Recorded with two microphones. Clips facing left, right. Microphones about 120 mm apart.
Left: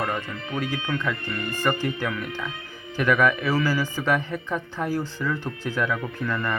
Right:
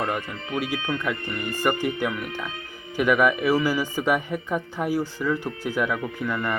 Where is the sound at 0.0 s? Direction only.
15° right (ahead or behind).